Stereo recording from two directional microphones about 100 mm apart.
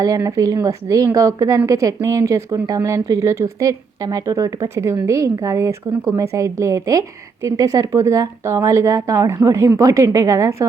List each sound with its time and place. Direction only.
0.2 s a woman's voice: 35° right (ahead or behind)